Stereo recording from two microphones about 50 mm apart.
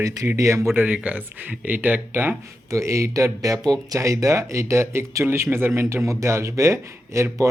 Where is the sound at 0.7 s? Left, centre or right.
Right.